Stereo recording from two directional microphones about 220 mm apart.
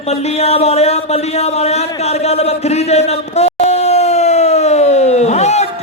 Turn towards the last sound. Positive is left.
turn(degrees=30)  # may be behind; listen again after turning